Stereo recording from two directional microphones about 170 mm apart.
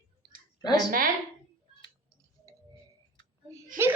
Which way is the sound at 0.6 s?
25° left (ahead or behind).